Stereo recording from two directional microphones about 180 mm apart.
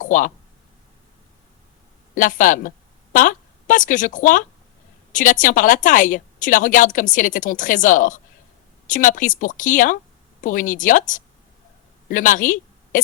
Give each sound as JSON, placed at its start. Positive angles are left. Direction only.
{"t": 0.0, "sound": "speech", "side_deg": 50}
{"t": 2.1, "sound": "a woman's voice", "side_deg": 50}
{"t": 12.0, "sound": "a sound", "side_deg": 50}